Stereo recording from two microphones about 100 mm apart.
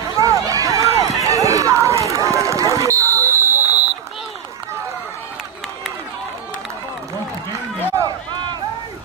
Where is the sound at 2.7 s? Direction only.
30° right (ahead or behind).